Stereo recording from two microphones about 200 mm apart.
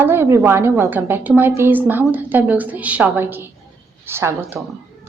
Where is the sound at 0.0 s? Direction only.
10° right (ahead or behind).